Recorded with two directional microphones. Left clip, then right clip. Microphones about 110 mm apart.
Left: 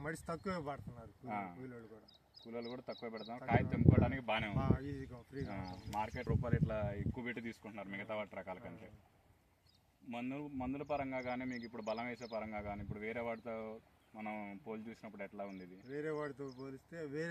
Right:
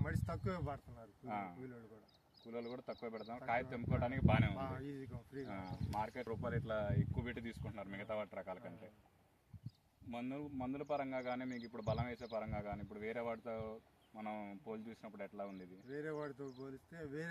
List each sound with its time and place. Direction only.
0.0 s speech: 20° right (ahead or behind)
1.3 s speech: centre (ahead or behind)
4.6 s speech: 20° right (ahead or behind)
5.5 s speech: 10° left (ahead or behind); by 8.7 s 10° right (ahead or behind)
10.1 s speech: 5° right (ahead or behind)
15.9 s speech: 30° right (ahead or behind)